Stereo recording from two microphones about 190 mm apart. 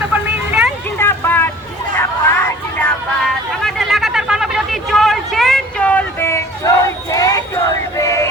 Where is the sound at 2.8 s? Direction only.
Centre (ahead or behind).